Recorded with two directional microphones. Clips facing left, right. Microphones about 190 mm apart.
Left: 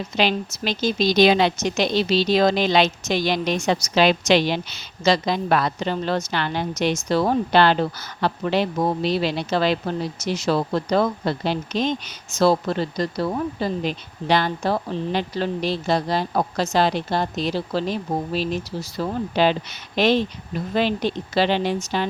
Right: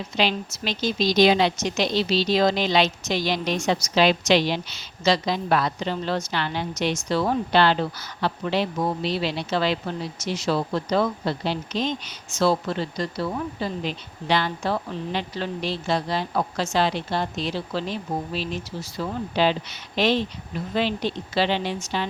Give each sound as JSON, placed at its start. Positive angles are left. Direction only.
{"t": 0.2, "sound": "a woman's voice", "side_deg": 50}
{"t": 12.4, "sound": "speech", "side_deg": 40}
{"t": 20.7, "sound": "a woman's voice", "side_deg": 45}